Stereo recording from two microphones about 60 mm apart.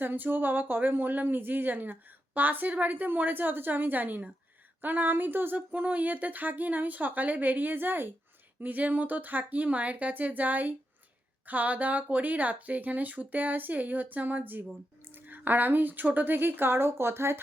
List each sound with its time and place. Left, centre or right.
0.0 s speech: right